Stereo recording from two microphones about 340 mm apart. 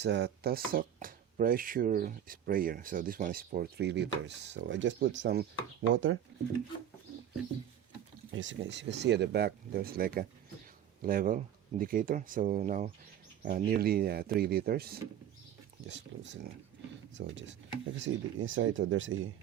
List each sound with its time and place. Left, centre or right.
0.0 s speech: right
8.3 s speech: right